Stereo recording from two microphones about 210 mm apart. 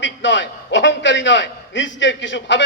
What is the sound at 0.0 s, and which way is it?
A man's voice, 60° left (ahead or behind).